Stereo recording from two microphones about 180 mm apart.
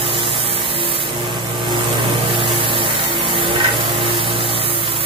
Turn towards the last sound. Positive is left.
turn(degrees=-30)  # may be behind; listen again after turning